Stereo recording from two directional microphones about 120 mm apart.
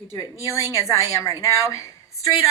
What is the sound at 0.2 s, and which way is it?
A woman's voice, 25° left (ahead or behind).